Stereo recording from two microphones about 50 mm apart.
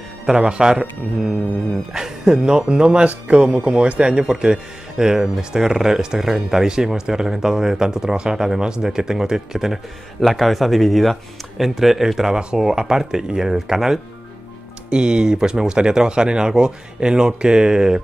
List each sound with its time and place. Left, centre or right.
0.3 s a man's voice: centre